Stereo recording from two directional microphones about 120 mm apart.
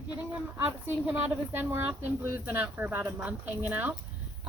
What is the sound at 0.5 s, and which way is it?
A woman's voice, 15° right (ahead or behind).